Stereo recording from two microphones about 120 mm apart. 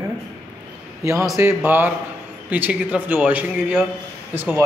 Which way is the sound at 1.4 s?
20° right (ahead or behind).